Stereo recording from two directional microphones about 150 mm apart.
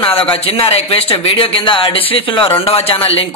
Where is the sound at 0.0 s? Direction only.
35° left (ahead or behind).